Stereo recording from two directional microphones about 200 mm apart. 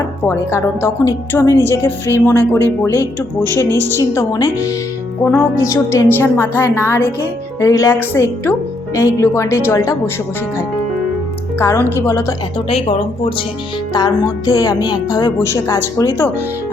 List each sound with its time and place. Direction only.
0.3 s a woman's voice: 10° left (ahead or behind)
5.6 s a woman's voice: 15° left (ahead or behind)
11.6 s a woman's voice: 10° left (ahead or behind)
12.6 s speech: 30° left (ahead or behind)
13.9 s a woman's voice: 20° left (ahead or behind)